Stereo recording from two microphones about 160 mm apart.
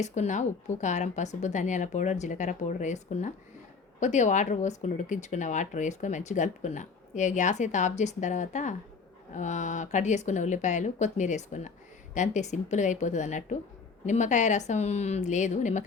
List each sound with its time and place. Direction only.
0.0 s speech: 45° left (ahead or behind)